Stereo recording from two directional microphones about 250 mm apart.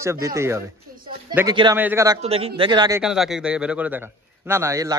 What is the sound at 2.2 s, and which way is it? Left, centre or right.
Speech, right.